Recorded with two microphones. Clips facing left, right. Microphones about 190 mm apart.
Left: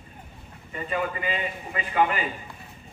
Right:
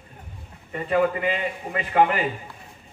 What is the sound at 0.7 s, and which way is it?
A man's voice, 60° right (ahead or behind).